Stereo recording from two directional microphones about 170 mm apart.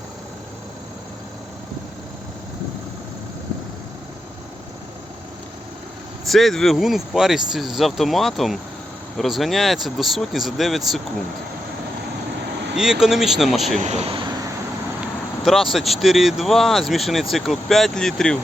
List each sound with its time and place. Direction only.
6.2 s speech: centre (ahead or behind)
12.7 s speech: 5° right (ahead or behind)
13.7 s speech: 40° right (ahead or behind)
15.4 s speech: centre (ahead or behind)